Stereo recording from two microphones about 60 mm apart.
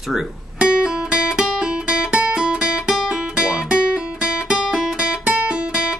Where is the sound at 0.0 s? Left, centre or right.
Centre.